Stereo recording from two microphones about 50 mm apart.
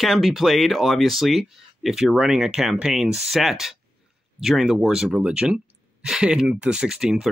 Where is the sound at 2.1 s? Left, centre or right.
Centre.